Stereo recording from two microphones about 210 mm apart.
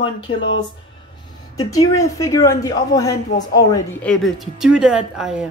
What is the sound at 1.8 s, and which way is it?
Speech, 80° left.